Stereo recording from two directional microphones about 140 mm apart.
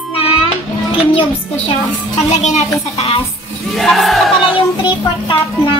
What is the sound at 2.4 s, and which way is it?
Speech, 55° left (ahead or behind).